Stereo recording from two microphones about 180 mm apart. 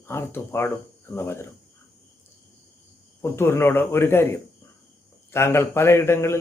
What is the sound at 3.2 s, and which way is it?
Speech, 15° left (ahead or behind).